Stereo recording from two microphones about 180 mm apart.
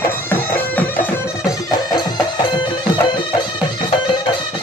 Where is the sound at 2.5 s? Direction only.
25° left (ahead or behind).